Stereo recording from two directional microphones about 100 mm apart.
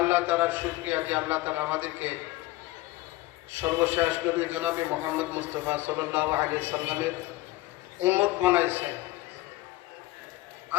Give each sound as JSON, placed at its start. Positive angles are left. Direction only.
{"t": 0.0, "sound": "a man's voice", "side_deg": -15}
{"t": 3.6, "sound": "a man's voice", "side_deg": -20}